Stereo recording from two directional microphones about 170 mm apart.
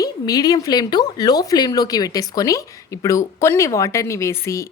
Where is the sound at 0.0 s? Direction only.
20° left (ahead or behind).